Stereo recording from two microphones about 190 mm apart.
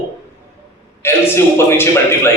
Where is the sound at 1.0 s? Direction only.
10° left (ahead or behind).